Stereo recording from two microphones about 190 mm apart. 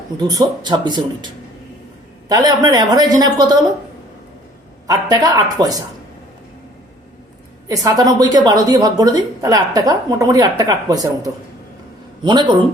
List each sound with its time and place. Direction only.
0.2 s a woman's voice: 20° right (ahead or behind)
2.3 s a woman's voice: 20° right (ahead or behind)
4.9 s a woman's voice: 20° right (ahead or behind)
7.7 s a woman's voice: 20° right (ahead or behind)